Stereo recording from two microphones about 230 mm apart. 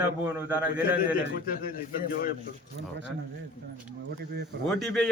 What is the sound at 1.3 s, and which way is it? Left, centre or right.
Speech, left.